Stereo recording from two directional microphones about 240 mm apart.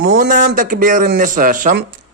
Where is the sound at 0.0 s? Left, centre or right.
Right.